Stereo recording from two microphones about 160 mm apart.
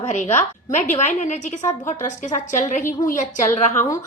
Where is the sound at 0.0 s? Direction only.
45° left (ahead or behind).